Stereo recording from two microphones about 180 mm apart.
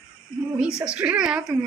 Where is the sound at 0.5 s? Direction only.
5° right (ahead or behind).